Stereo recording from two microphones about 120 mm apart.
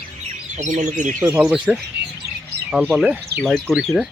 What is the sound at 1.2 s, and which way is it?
Speech, 30° right (ahead or behind).